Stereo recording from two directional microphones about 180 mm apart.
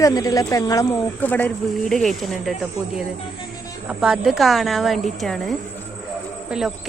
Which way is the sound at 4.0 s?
Centre (ahead or behind).